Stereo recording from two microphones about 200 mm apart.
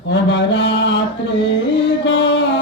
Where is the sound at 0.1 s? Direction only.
60° left (ahead or behind).